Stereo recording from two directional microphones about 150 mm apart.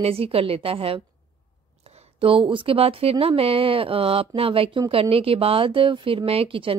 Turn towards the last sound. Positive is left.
turn(degrees=-35)  # may be behind; listen again after turning